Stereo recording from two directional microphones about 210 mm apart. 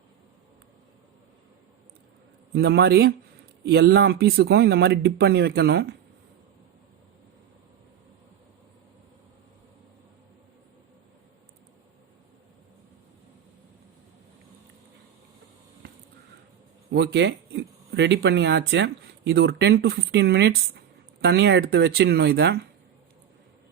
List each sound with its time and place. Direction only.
2.6 s speech: 50° right (ahead or behind)
16.9 s speech: 55° right (ahead or behind)